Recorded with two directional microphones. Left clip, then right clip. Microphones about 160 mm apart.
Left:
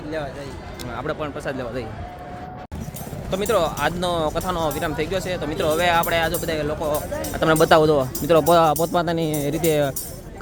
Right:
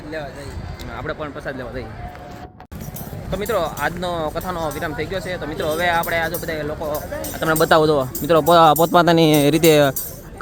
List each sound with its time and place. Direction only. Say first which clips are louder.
0.9 s speech: even; 5° left (ahead or behind)
3.2 s speech: left 1 dB; 5° left (ahead or behind)
7.6 s speech: right 1 dB; 5° right (ahead or behind); by 9.9 s 30° right (ahead or behind)